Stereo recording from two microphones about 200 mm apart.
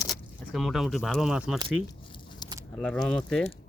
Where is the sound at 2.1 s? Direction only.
25° left (ahead or behind).